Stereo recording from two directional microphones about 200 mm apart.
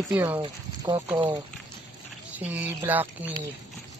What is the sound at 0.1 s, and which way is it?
Speech, 10° right (ahead or behind).